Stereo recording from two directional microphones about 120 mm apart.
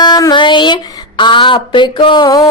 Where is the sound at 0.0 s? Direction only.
35° left (ahead or behind).